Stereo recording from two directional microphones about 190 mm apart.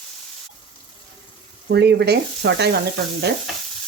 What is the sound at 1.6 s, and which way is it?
Sizzle, 65° right (ahead or behind).